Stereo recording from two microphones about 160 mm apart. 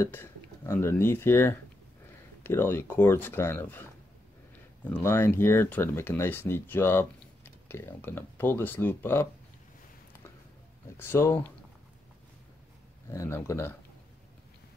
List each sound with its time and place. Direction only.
0.0 s speech: 15° left (ahead or behind)
11.0 s speech: 15° left (ahead or behind)
13.1 s speech: 15° left (ahead or behind)